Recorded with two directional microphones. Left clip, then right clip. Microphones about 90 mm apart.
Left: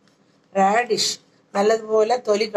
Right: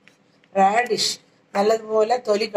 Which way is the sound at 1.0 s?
35° left (ahead or behind).